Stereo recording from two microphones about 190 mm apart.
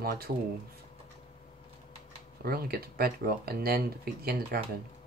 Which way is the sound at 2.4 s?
55° right (ahead or behind).